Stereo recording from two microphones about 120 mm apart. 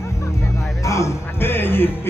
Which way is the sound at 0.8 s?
25° left (ahead or behind).